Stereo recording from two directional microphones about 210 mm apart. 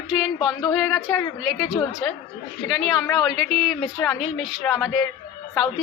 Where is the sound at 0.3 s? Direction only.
20° left (ahead or behind).